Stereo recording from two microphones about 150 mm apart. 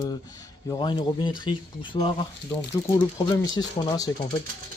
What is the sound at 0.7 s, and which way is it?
Speech, 30° left (ahead or behind).